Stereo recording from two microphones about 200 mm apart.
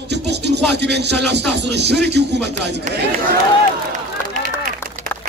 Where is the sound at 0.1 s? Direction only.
55° right (ahead or behind).